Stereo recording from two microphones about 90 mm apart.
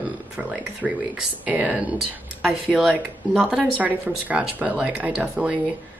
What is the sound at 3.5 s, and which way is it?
Speech, 10° right (ahead or behind).